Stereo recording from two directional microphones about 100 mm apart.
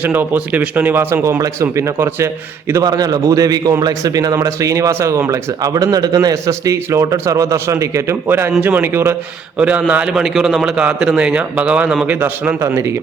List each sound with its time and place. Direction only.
0.0 s a man's voice: 20° right (ahead or behind)
9.6 s a man's voice: 10° right (ahead or behind)